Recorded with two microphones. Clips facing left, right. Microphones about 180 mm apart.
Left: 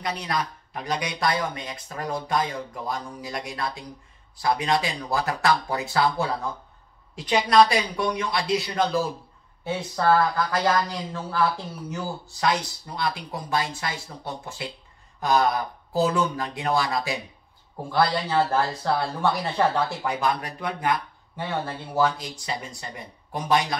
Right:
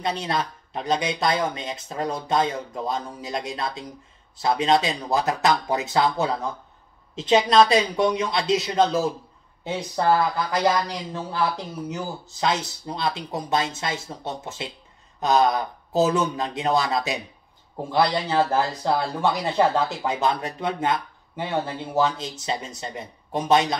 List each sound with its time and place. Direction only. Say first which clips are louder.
0.0 s speech: right 2 dB; 25° right (ahead or behind)